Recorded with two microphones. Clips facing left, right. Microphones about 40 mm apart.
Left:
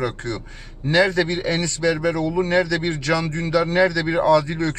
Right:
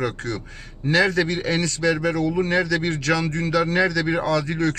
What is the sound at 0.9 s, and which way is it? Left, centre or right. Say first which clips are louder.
Speech: left 1 dB; centre.